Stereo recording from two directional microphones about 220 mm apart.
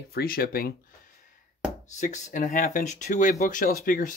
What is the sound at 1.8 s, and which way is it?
A man's voice, 35° left (ahead or behind).